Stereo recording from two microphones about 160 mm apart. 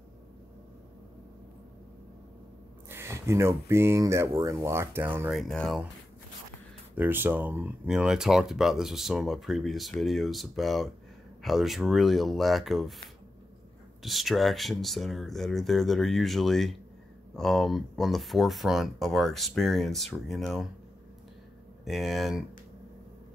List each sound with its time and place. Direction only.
2.9 s speech: 15° right (ahead or behind)
5.3 s speech: centre (ahead or behind)
7.0 s speech: 10° right (ahead or behind)
14.0 s speech: centre (ahead or behind)
21.8 s speech: centre (ahead or behind)